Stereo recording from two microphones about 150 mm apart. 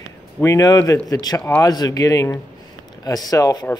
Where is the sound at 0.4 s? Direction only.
20° left (ahead or behind).